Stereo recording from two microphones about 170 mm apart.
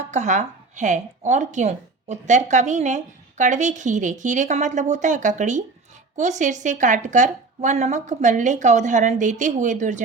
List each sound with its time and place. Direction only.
0.1 s speech: 45° right (ahead or behind)